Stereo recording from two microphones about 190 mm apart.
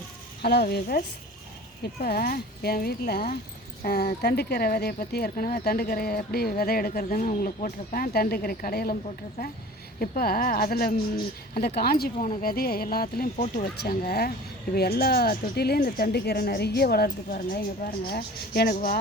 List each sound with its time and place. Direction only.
0.4 s speech: 55° left (ahead or behind)